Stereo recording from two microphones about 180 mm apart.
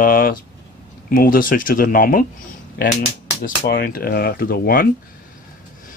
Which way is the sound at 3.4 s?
55° left (ahead or behind).